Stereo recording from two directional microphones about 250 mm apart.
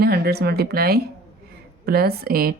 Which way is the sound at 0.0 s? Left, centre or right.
Right.